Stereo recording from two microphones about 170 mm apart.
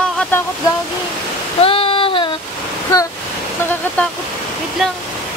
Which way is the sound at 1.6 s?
35° left (ahead or behind).